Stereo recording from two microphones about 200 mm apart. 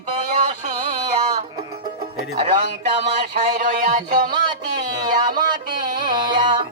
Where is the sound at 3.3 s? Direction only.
45° right (ahead or behind).